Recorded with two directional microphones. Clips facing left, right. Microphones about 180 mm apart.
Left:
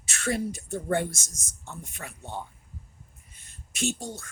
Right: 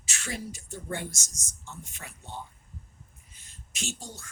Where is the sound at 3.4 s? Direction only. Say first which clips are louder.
Left 9 dB; 55° left (ahead or behind).